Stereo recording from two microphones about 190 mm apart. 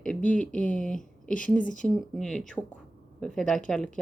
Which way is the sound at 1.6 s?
40° left (ahead or behind).